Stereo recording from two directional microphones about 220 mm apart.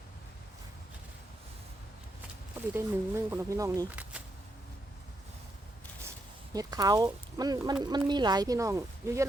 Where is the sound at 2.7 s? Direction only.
10° right (ahead or behind).